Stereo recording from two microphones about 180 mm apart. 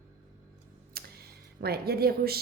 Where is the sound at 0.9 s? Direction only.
55° right (ahead or behind).